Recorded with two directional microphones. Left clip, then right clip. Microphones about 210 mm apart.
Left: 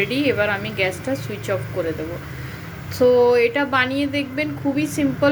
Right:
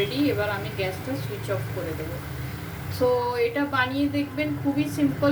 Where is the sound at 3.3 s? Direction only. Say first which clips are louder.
Left 8 dB; 35° left (ahead or behind).